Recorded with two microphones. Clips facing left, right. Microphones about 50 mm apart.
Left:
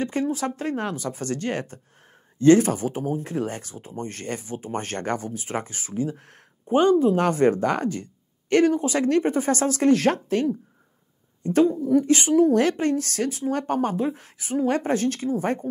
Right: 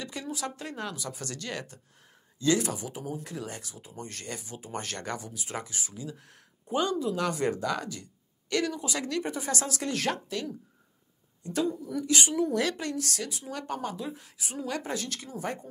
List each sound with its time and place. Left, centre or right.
0.0 s speech: left